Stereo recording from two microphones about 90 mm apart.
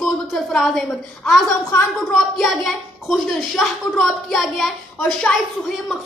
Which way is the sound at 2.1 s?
Centre (ahead or behind).